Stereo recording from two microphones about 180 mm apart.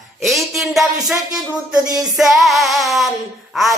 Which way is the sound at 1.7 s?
20° right (ahead or behind).